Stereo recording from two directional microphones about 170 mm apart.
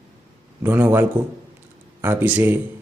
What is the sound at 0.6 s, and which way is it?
A man's voice, 10° right (ahead or behind).